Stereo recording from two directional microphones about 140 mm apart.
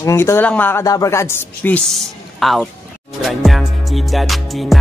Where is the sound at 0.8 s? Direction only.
25° left (ahead or behind).